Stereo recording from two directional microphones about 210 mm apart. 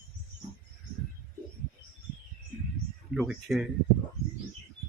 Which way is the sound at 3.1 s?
5° right (ahead or behind).